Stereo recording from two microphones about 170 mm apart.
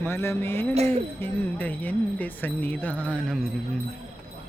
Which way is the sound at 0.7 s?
35° right (ahead or behind).